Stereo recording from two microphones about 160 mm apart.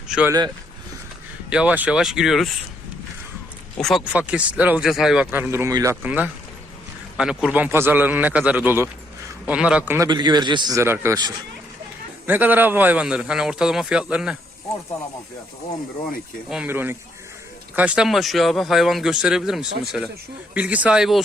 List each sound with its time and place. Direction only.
0.3 s a man's voice: 25° right (ahead or behind)
1.5 s speech: 10° right (ahead or behind)
3.8 s speech: centre (ahead or behind)
10.1 s a man's voice: 30° right (ahead or behind)
12.2 s speech: 10° right (ahead or behind)
16.5 s speech: 10° right (ahead or behind)